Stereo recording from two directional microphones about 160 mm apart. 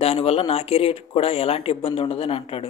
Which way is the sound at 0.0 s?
35° left (ahead or behind).